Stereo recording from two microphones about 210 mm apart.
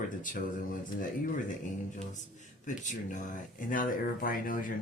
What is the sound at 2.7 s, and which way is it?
Speech, 35° left (ahead or behind).